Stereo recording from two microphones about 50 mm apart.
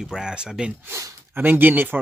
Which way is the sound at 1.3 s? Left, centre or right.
Right.